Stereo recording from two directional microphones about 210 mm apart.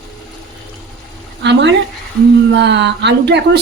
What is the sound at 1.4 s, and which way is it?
A woman's voice, 55° right (ahead or behind).